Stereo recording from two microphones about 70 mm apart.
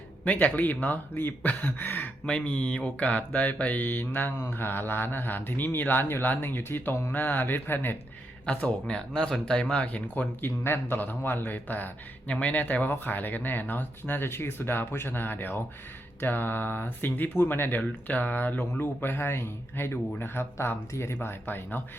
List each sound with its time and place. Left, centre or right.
0.3 s speech: left
2.2 s speech: centre
8.4 s speech: centre
10.4 s speech: left